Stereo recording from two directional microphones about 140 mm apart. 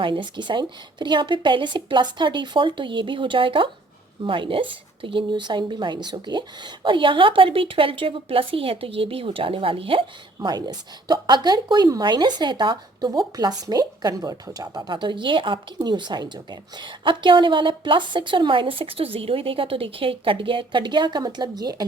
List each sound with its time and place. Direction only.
0.0 s a woman's voice: 35° right (ahead or behind)